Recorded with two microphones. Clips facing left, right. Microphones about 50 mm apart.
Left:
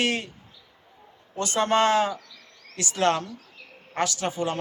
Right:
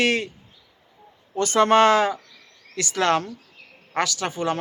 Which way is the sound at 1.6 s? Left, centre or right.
Right.